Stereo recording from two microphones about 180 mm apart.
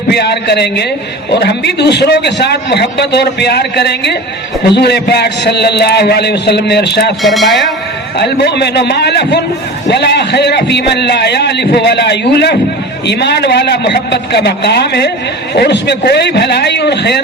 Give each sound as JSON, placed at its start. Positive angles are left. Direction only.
{"t": 0.1, "sound": "a man's voice", "side_deg": 65}
{"t": 7.2, "sound": "speech", "side_deg": 0}
{"t": 8.2, "sound": "a man's voice", "side_deg": 65}